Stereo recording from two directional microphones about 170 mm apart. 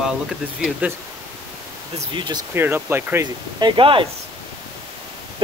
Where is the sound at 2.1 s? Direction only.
30° right (ahead or behind).